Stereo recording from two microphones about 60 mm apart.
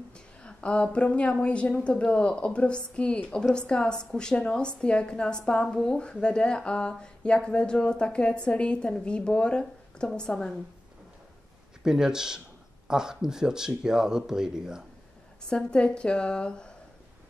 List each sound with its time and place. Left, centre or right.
0.4 s a sound: centre
0.9 s speech: centre
11.8 s speech: centre
15.5 s speech: centre